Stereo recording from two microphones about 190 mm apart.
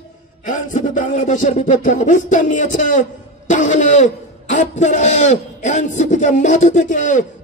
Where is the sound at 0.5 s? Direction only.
40° left (ahead or behind).